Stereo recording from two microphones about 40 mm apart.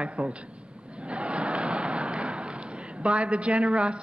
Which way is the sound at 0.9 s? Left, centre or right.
Right.